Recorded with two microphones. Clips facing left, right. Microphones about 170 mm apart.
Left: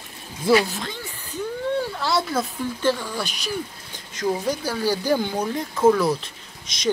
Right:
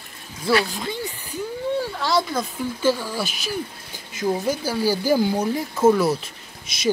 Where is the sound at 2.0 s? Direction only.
5° left (ahead or behind).